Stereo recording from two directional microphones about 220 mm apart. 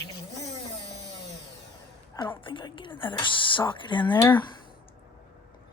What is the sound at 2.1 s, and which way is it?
Whispering, 20° left (ahead or behind).